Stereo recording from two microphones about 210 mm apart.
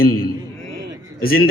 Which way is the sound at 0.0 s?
45° left (ahead or behind).